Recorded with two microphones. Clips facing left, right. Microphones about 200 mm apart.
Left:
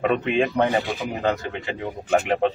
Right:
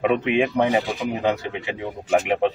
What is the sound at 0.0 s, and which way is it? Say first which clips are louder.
Speech: right 1 dB; 10° right (ahead or behind).